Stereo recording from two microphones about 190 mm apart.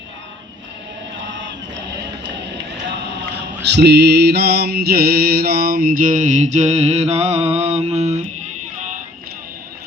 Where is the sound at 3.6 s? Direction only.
60° right (ahead or behind); by 8.2 s 35° right (ahead or behind).